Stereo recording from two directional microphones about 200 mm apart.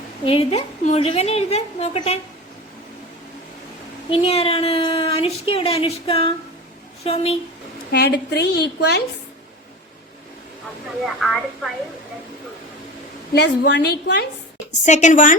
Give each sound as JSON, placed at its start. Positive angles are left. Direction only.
{"t": 0.3, "sound": "a woman's voice", "side_deg": 30}
{"t": 4.1, "sound": "a woman's voice", "side_deg": 30}
{"t": 7.9, "sound": "a woman's voice", "side_deg": 55}
{"t": 11.0, "sound": "a woman's voice", "side_deg": 0}
{"t": 13.3, "sound": "a woman's voice", "side_deg": 55}
{"t": 14.8, "sound": "a woman's voice", "side_deg": 35}